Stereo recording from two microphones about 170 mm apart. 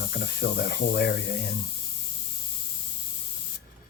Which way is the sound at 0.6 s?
70° left (ahead or behind).